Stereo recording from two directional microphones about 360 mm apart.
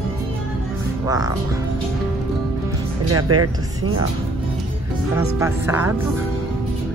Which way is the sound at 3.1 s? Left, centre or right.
Right.